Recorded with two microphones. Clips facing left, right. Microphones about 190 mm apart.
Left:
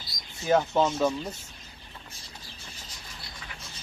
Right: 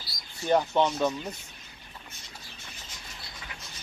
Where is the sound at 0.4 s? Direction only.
5° left (ahead or behind).